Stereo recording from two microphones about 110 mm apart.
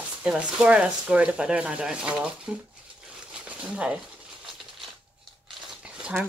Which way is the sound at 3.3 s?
10° right (ahead or behind).